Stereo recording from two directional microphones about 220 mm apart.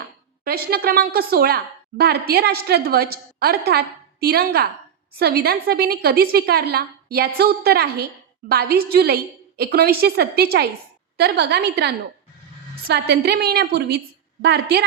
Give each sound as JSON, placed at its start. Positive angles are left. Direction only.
{"t": 0.4, "sound": "a woman's voice", "side_deg": -45}